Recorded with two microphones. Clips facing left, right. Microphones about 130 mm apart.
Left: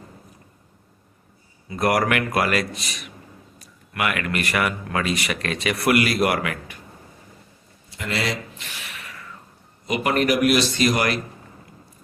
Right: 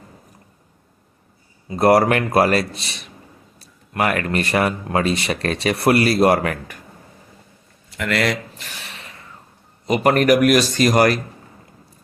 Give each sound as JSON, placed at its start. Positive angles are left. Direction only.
{"t": 1.7, "sound": "speech", "side_deg": -30}
{"t": 7.9, "sound": "speech", "side_deg": -60}
{"t": 8.5, "sound": "a sound", "side_deg": -35}
{"t": 9.8, "sound": "speech", "side_deg": -40}